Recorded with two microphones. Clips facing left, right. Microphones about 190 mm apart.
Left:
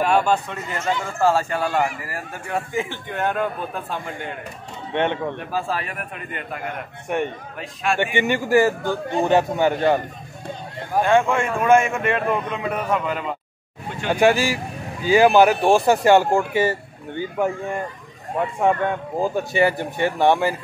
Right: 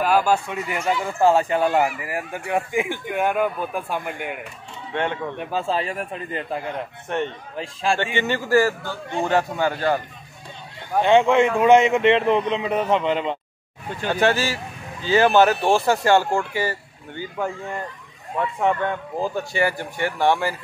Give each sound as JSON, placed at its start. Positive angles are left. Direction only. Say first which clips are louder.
{"t": 0.0, "sound": "a man's voice", "louder": "even", "side_deg": -5}
{"t": 4.9, "sound": "speech", "louder": "left 3 dB", "side_deg": 20}
{"t": 5.4, "sound": "a man's voice", "louder": "right 2 dB", "side_deg": -25}
{"t": 7.1, "sound": "speech", "louder": "left 2 dB", "side_deg": 10}
{"t": 7.5, "sound": "a man's voice", "louder": "right 2 dB", "side_deg": -30}
{"t": 8.0, "sound": "speech", "louder": "left 2 dB", "side_deg": 15}
{"t": 11.0, "sound": "a man's voice", "louder": "right 2 dB", "side_deg": -20}
{"t": 14.0, "sound": "speech", "louder": "left 3 dB", "side_deg": 15}
{"t": 18.6, "sound": "speech", "louder": "left 2 dB", "side_deg": 15}